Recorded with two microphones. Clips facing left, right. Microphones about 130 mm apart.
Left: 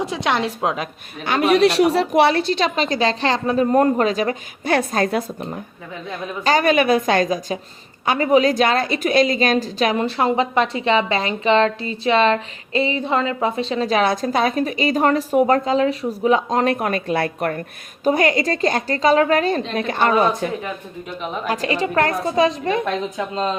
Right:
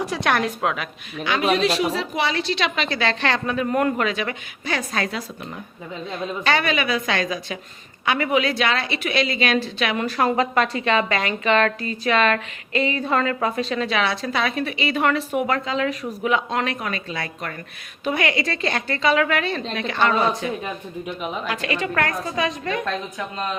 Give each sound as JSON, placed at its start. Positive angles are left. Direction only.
{"t": 0.0, "sound": "a woman's voice", "side_deg": 20}
{"t": 1.2, "sound": "a woman's voice", "side_deg": 55}
{"t": 2.5, "sound": "a woman's voice", "side_deg": 40}
{"t": 4.7, "sound": "a woman's voice", "side_deg": 50}
{"t": 13.8, "sound": "a woman's voice", "side_deg": 45}
{"t": 16.7, "sound": "a woman's voice", "side_deg": 55}
{"t": 18.0, "sound": "a woman's voice", "side_deg": 40}
{"t": 21.4, "sound": "a woman's voice", "side_deg": 40}